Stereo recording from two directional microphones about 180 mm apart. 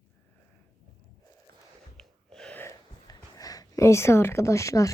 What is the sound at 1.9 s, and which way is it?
Gasp, 5° left (ahead or behind).